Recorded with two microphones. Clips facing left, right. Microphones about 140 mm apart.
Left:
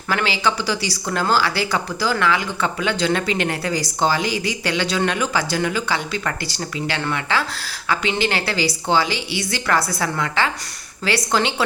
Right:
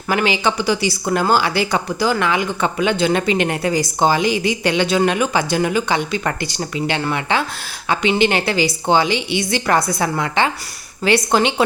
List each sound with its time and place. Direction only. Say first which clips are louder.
0.1 s a woman's voice: right 3 dB; 20° right (ahead or behind)